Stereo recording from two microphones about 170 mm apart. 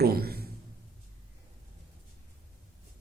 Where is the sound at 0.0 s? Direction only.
65° right (ahead or behind).